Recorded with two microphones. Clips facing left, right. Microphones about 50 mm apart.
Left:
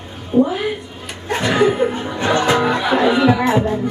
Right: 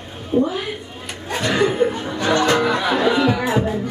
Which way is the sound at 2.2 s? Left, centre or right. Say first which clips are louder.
Left 1 dB; left.